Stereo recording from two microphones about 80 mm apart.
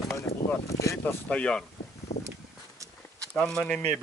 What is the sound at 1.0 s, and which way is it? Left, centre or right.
Speech, left.